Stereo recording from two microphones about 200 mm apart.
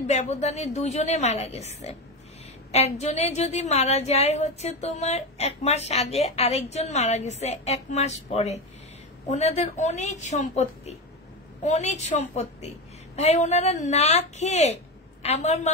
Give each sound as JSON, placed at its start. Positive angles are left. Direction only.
{"t": 0.0, "sound": "a woman's voice", "side_deg": 35}